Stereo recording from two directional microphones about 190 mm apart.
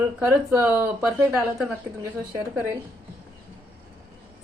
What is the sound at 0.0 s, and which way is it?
Speech, 15° right (ahead or behind).